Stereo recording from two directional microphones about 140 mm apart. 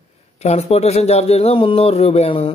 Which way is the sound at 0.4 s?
50° left (ahead or behind).